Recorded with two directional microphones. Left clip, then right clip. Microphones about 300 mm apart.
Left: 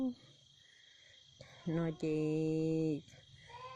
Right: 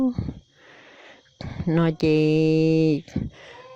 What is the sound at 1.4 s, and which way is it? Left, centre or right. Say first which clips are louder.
Speech: right 16 dB; right.